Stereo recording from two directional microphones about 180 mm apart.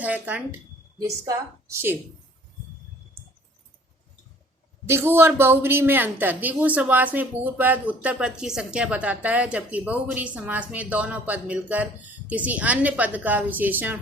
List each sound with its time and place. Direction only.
0.0 s a woman's voice: 10° right (ahead or behind)
4.9 s a woman's voice: 15° right (ahead or behind)